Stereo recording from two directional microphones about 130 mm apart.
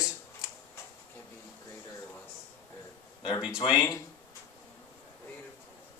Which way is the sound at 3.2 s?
35° left (ahead or behind).